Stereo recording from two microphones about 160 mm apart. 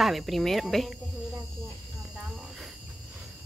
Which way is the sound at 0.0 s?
Centre (ahead or behind).